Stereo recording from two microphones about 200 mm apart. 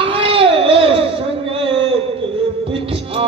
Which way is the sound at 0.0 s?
25° right (ahead or behind).